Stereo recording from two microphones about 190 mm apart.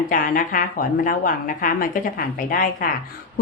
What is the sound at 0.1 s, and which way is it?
A woman's voice, 45° left (ahead or behind).